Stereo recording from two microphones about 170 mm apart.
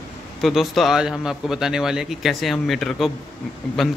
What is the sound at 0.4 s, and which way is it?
A man's voice, centre (ahead or behind).